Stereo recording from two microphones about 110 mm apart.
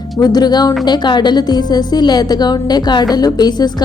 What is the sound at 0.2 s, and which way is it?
A woman's voice, 40° left (ahead or behind).